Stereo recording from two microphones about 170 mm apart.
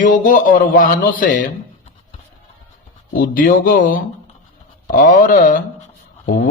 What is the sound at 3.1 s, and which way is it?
Speech, 55° left (ahead or behind).